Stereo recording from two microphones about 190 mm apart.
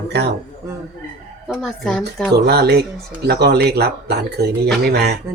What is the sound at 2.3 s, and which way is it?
Speech, 60° right (ahead or behind).